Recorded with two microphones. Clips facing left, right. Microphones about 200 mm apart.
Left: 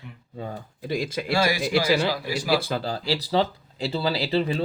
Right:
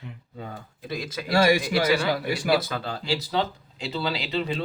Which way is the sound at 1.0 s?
30° left (ahead or behind).